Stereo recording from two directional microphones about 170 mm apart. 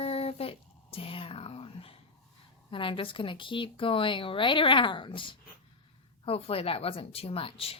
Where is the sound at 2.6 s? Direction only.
30° left (ahead or behind).